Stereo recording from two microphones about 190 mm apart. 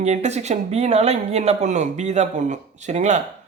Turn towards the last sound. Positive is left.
turn(degrees=-40)  # may be behind; listen again after turning